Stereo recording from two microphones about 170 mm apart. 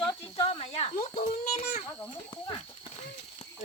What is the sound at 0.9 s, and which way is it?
Speech, 50° left (ahead or behind).